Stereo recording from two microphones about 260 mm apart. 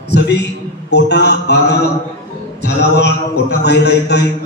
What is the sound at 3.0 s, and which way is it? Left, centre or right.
A man's voice, left.